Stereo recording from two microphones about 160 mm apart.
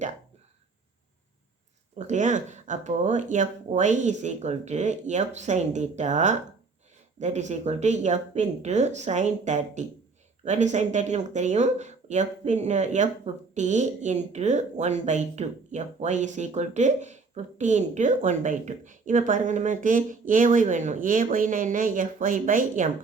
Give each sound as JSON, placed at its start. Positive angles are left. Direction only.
{"t": 2.0, "sound": "speech", "side_deg": -50}